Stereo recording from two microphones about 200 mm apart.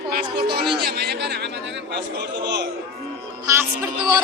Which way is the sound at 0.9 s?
55° right (ahead or behind).